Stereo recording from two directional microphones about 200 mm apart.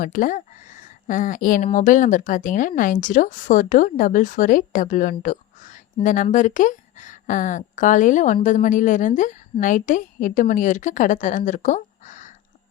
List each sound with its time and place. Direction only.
0.0 s speech: 40° left (ahead or behind)